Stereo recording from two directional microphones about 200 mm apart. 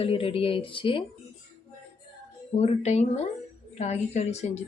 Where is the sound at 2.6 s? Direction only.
35° left (ahead or behind).